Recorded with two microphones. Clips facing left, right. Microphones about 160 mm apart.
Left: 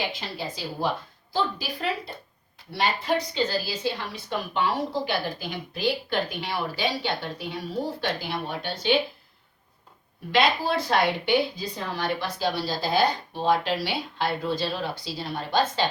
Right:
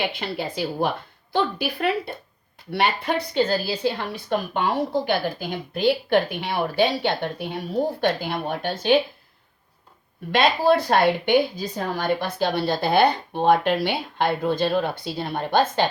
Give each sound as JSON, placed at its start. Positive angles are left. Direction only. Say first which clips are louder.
{"t": 0.0, "sound": "a woman's voice", "louder": "right 5 dB", "side_deg": -60}
{"t": 10.3, "sound": "a woman's voice", "louder": "right 5 dB", "side_deg": -55}